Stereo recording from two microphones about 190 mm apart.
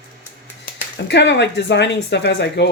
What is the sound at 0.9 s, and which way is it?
Speech, 65° left (ahead or behind).